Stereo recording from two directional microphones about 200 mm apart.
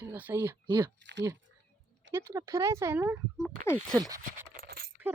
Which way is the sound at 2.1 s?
15° right (ahead or behind).